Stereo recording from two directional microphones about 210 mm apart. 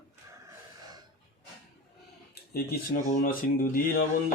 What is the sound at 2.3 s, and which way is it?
Speech, 45° left (ahead or behind).